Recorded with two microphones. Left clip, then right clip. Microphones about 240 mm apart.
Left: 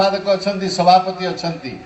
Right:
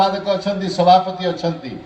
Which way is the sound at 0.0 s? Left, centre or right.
Right.